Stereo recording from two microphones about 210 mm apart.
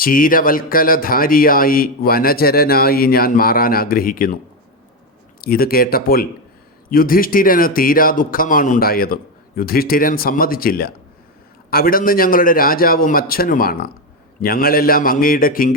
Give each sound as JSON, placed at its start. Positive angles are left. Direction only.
{"t": 0.0, "sound": "speech", "side_deg": 40}
{"t": 5.4, "sound": "speech", "side_deg": 45}